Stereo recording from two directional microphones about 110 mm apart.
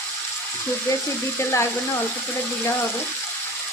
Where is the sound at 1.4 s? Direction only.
25° left (ahead or behind).